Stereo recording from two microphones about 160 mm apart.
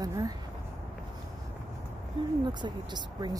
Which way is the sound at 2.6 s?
25° right (ahead or behind).